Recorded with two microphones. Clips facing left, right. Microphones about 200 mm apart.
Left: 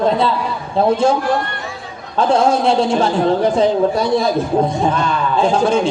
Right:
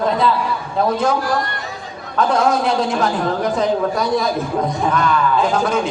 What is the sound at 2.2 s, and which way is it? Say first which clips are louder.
A man's voice: left 2 dB; 30° left (ahead or behind).